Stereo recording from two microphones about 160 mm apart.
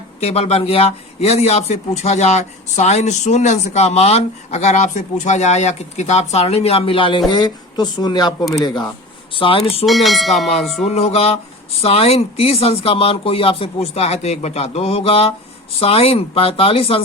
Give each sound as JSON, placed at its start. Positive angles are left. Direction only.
{"t": 0.2, "sound": "a man's voice", "side_deg": 40}
{"t": 9.8, "sound": "speech", "side_deg": 0}
{"t": 10.8, "sound": "speech", "side_deg": 40}